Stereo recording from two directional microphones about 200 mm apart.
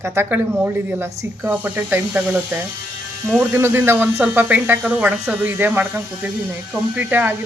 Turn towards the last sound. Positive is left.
turn(degrees=-10)  # may be behind; listen again after turning